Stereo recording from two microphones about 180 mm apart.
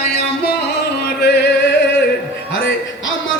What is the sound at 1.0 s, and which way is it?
Chant, 70° left (ahead or behind).